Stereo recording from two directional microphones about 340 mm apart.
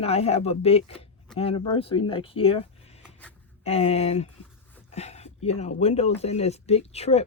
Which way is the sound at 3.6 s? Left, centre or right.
Centre.